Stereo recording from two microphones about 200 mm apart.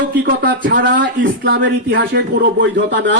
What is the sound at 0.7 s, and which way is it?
Speech, 60° right (ahead or behind).